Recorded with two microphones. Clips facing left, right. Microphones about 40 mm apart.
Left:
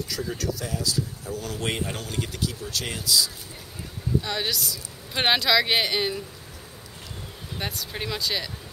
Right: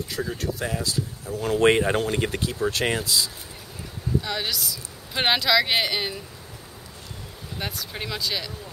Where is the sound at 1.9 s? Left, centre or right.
Right.